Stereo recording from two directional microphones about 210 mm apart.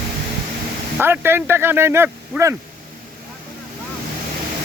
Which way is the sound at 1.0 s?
10° right (ahead or behind).